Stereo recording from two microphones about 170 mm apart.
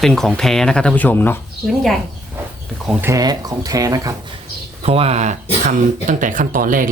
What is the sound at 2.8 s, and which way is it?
Speech, 10° right (ahead or behind).